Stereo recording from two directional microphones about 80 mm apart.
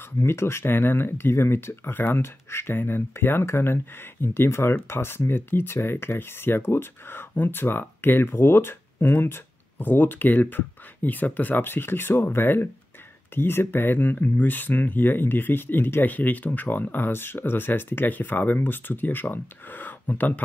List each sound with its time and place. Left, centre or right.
0.2 s speech: left